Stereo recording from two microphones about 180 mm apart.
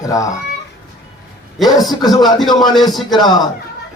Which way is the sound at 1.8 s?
20° left (ahead or behind).